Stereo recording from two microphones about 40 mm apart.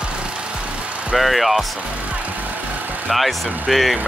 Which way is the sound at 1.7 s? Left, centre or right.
Right.